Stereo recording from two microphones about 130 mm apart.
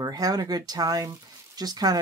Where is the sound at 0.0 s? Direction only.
30° right (ahead or behind).